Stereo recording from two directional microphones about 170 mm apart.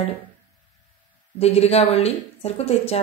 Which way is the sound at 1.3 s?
40° left (ahead or behind).